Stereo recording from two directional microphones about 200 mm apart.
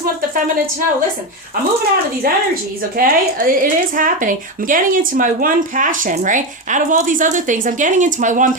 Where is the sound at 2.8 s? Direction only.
45° right (ahead or behind).